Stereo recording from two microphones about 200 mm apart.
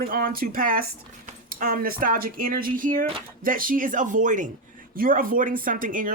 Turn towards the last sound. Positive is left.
turn(degrees=-40)  # may be behind; listen again after turning